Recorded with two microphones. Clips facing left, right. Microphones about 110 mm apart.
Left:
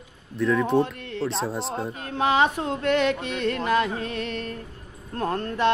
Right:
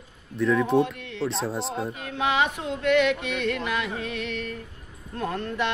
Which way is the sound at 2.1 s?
40° left (ahead or behind).